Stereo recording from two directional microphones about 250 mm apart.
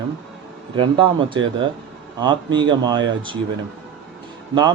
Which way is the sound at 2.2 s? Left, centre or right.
Centre.